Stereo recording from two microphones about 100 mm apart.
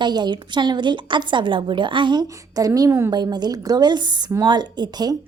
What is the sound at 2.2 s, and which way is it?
A woman's voice, 35° right (ahead or behind).